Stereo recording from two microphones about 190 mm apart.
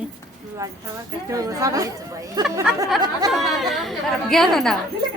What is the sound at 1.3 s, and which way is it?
A woman's voice, 20° right (ahead or behind).